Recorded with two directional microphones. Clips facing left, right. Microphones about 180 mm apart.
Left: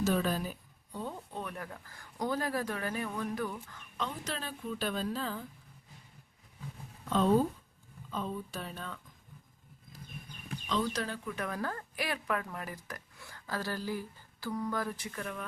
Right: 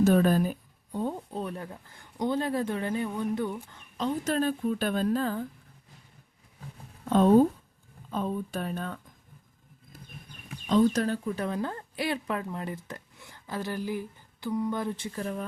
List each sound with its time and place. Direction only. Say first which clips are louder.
0.0 s speech: right 8 dB; 50° right (ahead or behind)
1.3 s a woman's voice: right 6 dB; 30° right (ahead or behind)
4.2 s speech: right 12 dB; 50° right (ahead or behind)
7.1 s speech: right 7 dB; 55° right (ahead or behind)
10.7 s a woman's voice: right 10 dB; 45° right (ahead or behind)